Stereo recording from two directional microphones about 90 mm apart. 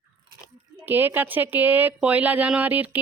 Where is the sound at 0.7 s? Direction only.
20° right (ahead or behind).